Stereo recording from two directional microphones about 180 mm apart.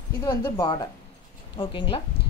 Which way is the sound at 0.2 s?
20° left (ahead or behind).